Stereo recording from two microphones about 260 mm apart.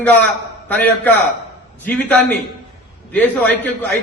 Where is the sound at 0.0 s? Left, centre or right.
Centre.